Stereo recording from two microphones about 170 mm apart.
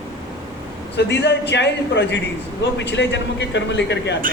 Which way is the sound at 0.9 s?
90° left.